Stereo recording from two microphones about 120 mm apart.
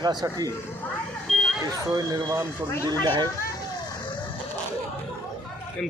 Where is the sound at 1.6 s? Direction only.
30° right (ahead or behind).